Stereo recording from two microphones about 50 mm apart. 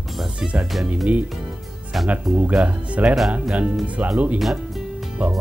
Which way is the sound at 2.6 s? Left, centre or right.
Right.